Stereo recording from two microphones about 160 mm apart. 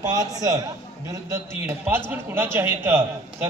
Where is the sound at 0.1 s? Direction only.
25° right (ahead or behind).